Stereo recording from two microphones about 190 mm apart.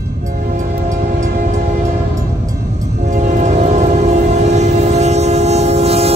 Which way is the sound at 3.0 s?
40° right (ahead or behind).